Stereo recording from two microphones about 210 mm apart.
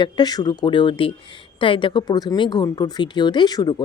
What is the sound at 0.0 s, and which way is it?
Speech, 20° left (ahead or behind).